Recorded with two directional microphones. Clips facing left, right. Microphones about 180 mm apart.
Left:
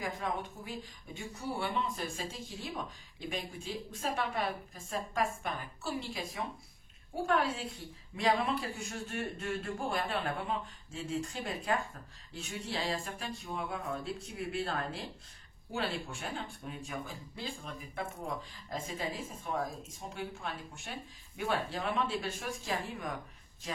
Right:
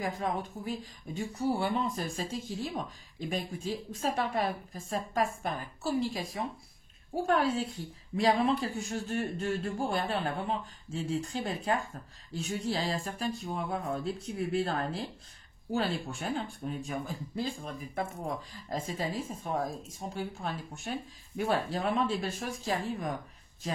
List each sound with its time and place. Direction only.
0.0 s speech: 40° right (ahead or behind)